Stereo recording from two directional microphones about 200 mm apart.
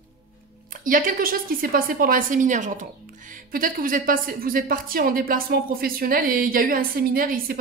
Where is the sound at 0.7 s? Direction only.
45° right (ahead or behind).